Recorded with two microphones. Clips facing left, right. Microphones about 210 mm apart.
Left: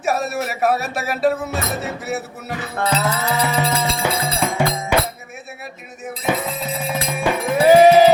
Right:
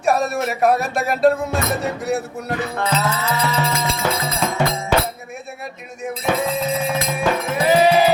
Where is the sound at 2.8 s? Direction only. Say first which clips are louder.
Left 4 dB; 35° left (ahead or behind).